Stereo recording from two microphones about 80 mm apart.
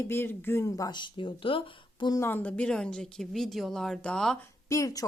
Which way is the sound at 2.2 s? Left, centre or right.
Left.